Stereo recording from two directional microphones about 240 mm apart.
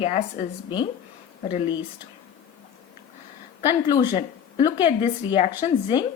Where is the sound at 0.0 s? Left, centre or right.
Left.